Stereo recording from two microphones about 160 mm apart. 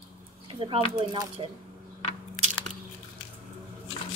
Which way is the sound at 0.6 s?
35° right (ahead or behind).